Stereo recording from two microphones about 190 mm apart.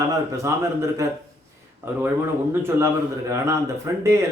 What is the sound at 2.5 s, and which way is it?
Speech, 15° right (ahead or behind).